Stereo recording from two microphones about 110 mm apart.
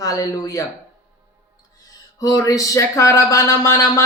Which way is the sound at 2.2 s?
30° left (ahead or behind).